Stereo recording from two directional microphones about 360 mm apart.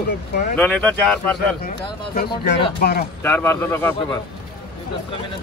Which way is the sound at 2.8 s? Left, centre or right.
Left.